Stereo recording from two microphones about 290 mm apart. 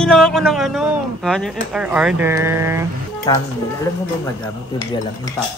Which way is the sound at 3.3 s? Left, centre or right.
Centre.